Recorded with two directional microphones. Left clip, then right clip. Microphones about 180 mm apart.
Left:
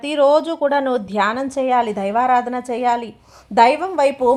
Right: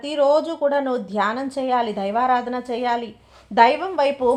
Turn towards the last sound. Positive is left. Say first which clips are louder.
# left 3 dB
turn(degrees=45)  # may be behind; listen again after turning